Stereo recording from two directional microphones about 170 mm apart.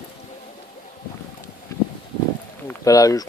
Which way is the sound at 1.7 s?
20° left (ahead or behind).